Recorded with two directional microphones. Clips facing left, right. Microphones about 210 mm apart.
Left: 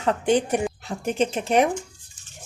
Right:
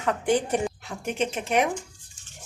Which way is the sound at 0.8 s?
35° left (ahead or behind).